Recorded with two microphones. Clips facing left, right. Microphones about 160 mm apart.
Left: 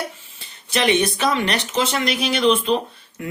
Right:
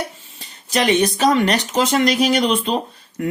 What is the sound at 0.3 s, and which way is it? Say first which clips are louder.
Speech: right 3 dB; 40° right (ahead or behind).